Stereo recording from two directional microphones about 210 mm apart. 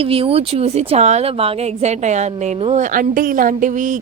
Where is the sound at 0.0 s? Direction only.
25° right (ahead or behind).